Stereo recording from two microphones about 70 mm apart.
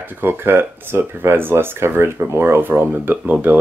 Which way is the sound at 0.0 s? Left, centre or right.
Right.